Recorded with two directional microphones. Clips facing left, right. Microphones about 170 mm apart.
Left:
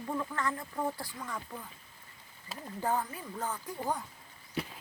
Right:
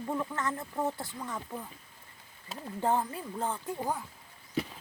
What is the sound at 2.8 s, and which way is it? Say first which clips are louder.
Speech: right 3 dB; 25° right (ahead or behind).